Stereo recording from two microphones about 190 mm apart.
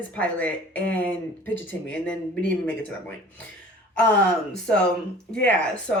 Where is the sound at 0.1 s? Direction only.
10° left (ahead or behind).